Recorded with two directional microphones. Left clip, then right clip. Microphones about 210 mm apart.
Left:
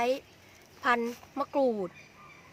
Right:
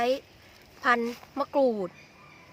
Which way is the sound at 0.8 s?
10° right (ahead or behind).